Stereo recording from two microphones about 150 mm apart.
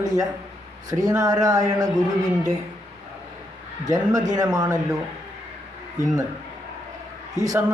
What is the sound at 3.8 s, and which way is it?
A man's voice, 25° right (ahead or behind).